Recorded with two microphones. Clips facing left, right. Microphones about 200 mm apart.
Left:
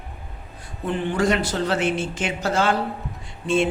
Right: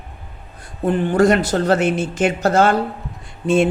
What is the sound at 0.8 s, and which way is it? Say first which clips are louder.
Speech: right 7 dB; 45° right (ahead or behind).